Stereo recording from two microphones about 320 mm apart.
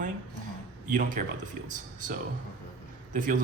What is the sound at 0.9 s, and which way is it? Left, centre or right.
Speech, right.